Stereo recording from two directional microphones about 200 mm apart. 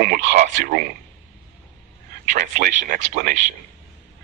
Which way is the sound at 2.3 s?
40° right (ahead or behind).